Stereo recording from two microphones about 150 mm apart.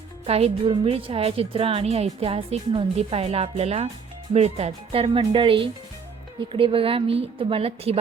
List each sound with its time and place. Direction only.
0.3 s a woman's voice: 40° right (ahead or behind)